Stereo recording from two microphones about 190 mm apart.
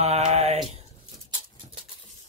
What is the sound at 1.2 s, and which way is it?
Dog, 30° right (ahead or behind).